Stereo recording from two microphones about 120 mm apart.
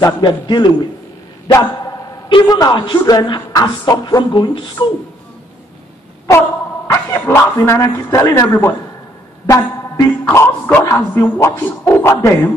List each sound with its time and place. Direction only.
0.2 s a man's voice: 40° left (ahead or behind)
6.9 s a man's voice: 20° left (ahead or behind)
9.5 s music: 30° left (ahead or behind)
11.3 s a man's voice: 20° left (ahead or behind)